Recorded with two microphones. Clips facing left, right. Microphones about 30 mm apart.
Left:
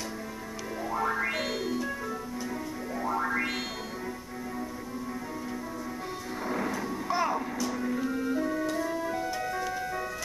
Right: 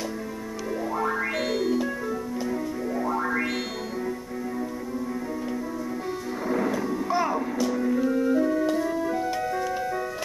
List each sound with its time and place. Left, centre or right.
0.9 s music: centre
3.0 s music: centre
6.4 s music: centre